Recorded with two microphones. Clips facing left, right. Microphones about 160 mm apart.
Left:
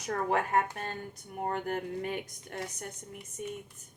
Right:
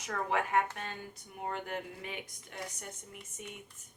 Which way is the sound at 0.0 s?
40° left (ahead or behind).